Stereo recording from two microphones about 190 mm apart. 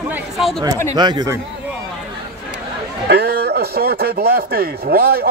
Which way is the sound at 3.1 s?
60° right (ahead or behind).